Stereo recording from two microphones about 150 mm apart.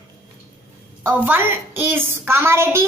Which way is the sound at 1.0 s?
10° right (ahead or behind).